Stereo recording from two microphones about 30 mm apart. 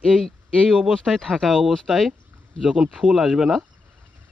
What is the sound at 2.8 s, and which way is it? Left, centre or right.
Speech, right.